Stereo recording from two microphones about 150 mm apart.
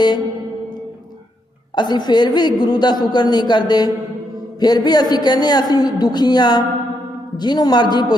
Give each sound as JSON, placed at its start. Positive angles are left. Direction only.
{"t": 1.7, "sound": "a woman's voice", "side_deg": 30}